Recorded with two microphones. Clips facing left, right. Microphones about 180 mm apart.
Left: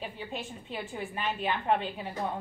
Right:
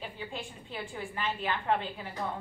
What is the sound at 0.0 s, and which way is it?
A woman's voice, 20° left (ahead or behind).